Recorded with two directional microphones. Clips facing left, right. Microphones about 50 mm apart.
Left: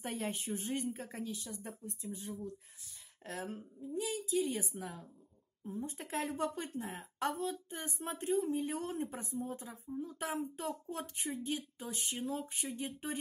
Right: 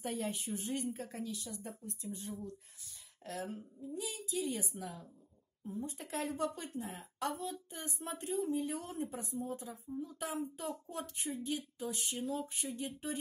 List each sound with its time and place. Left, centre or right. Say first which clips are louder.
0.0 s a woman's voice: even; left
2.0 s speech: left 1 dB; centre
3.3 s a woman's voice: even; left